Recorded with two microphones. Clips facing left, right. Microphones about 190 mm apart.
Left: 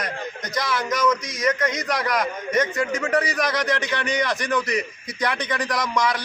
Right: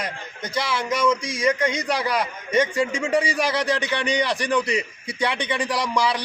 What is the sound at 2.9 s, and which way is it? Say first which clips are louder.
Speech: even; 10° right (ahead or behind).